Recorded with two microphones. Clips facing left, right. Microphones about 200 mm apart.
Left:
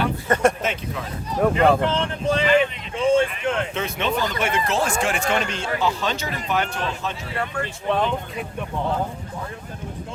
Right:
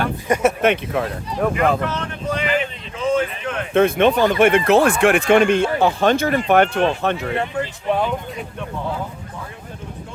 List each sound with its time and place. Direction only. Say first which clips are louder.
0.3 s speech: right 3 dB; 15° right (ahead or behind)
0.6 s speech: right 9 dB; 65° right (ahead or behind)
1.5 s speech: left 1 dB; 30° left (ahead or behind)
3.8 s speech: right 10 dB; 55° right (ahead or behind)
7.3 s speech: right 4 dB; 20° right (ahead or behind)